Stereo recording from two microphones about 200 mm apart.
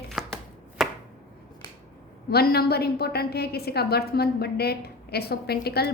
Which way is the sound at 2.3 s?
50° left (ahead or behind).